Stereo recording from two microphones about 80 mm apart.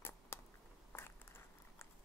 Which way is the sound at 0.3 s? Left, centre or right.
Left.